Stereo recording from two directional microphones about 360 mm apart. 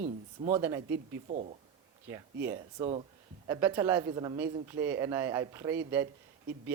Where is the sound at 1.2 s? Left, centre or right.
Right.